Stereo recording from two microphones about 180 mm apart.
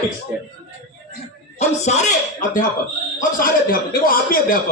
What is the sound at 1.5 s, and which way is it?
Speech, 40° left (ahead or behind).